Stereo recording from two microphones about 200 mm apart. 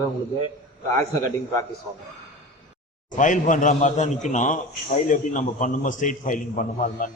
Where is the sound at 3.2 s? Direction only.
40° left (ahead or behind).